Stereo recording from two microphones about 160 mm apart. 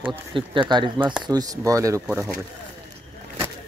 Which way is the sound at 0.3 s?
30° right (ahead or behind).